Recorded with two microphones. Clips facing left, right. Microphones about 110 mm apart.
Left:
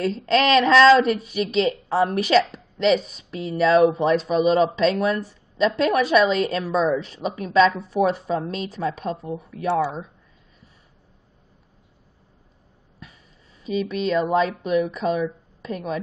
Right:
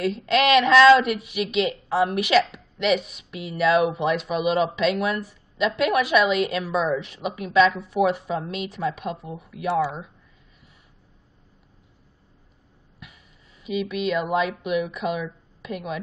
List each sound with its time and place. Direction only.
0.0 s a woman's voice: 35° left (ahead or behind)
13.0 s speech: 35° left (ahead or behind)